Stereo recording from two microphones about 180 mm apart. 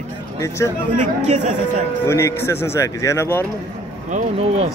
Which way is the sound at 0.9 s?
45° right (ahead or behind).